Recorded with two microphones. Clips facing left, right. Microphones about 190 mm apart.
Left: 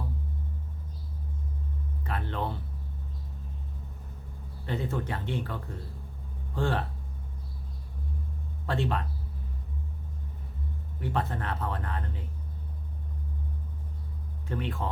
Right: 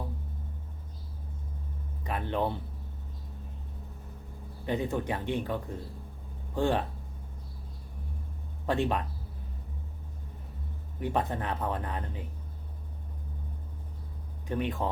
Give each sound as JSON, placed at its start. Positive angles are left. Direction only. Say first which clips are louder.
{"t": 2.0, "sound": "speech", "louder": "right 3 dB", "side_deg": -15}
{"t": 4.6, "sound": "speech", "louder": "right 2 dB", "side_deg": -15}
{"t": 8.6, "sound": "speech", "louder": "right 2 dB", "side_deg": -15}
{"t": 11.0, "sound": "speech", "louder": "right 2 dB", "side_deg": -15}
{"t": 14.4, "sound": "speech", "louder": "right 3 dB", "side_deg": -15}